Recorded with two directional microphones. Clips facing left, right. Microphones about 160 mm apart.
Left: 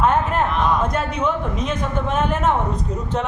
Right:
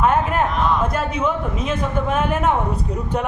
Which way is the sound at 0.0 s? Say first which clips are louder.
Even; 5° right (ahead or behind).